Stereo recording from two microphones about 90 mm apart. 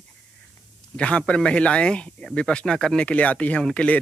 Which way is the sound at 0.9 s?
15° left (ahead or behind).